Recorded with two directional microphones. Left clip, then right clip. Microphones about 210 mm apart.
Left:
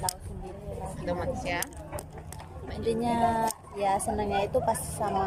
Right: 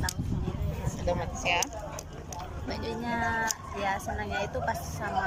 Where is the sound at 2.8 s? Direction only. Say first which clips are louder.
Left 6 dB; 20° left (ahead or behind).